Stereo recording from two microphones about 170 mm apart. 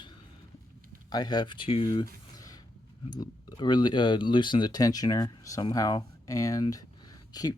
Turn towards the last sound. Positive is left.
turn(degrees=20)  # may be behind; listen again after turning